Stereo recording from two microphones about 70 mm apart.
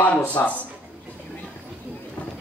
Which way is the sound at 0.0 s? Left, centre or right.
Left.